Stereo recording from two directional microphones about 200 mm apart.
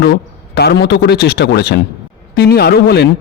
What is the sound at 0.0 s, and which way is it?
A man's voice, 55° left (ahead or behind).